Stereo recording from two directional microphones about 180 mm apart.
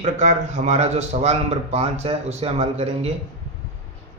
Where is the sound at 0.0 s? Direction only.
40° right (ahead or behind).